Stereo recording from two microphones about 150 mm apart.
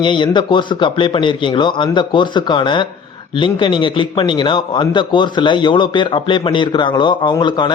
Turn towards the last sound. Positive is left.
turn(degrees=30)  # may be behind; listen again after turning